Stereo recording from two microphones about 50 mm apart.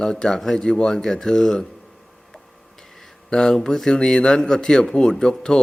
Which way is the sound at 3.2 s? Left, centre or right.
Centre.